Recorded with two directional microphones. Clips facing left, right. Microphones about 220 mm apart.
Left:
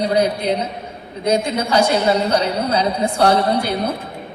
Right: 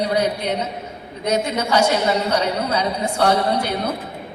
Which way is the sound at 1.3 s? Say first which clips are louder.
Left 2 dB; 30° left (ahead or behind).